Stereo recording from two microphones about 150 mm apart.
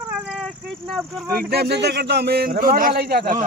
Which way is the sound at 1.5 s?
90° right.